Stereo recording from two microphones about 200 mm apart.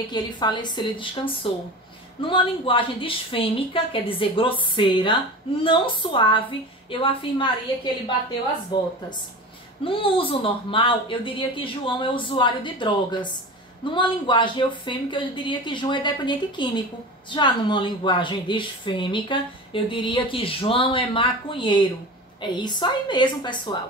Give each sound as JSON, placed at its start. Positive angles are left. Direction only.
{"t": 0.1, "sound": "a woman's voice", "side_deg": 20}
{"t": 8.7, "sound": "a woman's voice", "side_deg": 20}